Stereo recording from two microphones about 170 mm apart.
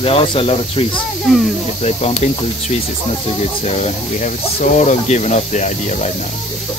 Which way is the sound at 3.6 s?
40° left (ahead or behind).